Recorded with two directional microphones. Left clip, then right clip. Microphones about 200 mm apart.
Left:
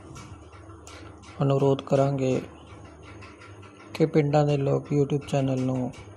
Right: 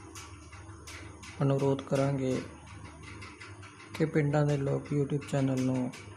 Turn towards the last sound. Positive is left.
turn(degrees=10)  # may be behind; listen again after turning